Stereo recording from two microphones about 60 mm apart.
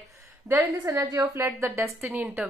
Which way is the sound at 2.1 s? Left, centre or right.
Right.